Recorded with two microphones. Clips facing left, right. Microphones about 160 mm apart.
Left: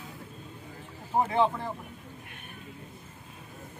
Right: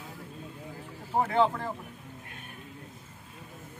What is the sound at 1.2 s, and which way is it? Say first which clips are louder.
Speech: even; 15° left (ahead or behind).